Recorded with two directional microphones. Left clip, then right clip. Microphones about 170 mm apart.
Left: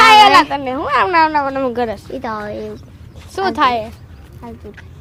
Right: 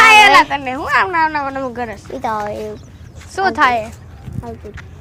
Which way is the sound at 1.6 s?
40° left (ahead or behind).